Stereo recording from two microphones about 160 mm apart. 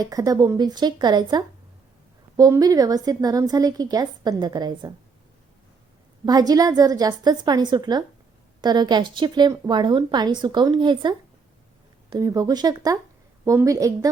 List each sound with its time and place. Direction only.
0.0 s a woman's voice: 25° right (ahead or behind)
6.2 s a woman's voice: 25° right (ahead or behind)
12.1 s a woman's voice: 25° right (ahead or behind)